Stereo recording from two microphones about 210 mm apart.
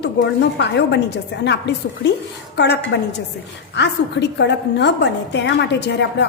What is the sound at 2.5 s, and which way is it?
A woman's voice, 55° left (ahead or behind).